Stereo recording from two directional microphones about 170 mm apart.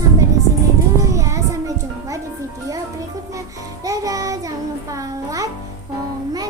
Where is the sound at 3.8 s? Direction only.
20° right (ahead or behind).